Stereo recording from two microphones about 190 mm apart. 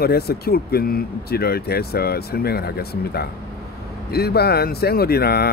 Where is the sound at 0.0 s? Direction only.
55° left (ahead or behind).